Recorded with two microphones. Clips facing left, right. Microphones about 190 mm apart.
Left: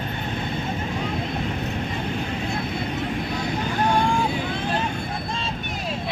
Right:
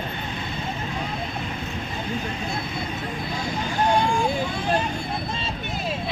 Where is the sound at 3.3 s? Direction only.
65° left (ahead or behind).